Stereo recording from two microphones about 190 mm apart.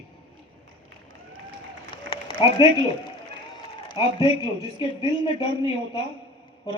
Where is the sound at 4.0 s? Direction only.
25° left (ahead or behind).